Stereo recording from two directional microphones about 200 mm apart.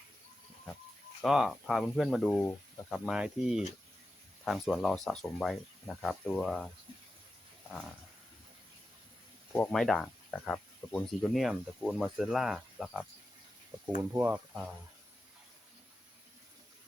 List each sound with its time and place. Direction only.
1.2 s speech: centre (ahead or behind)
9.5 s speech: 5° left (ahead or behind)